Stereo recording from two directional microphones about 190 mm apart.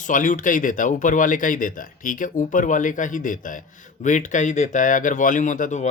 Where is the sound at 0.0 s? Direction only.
45° left (ahead or behind).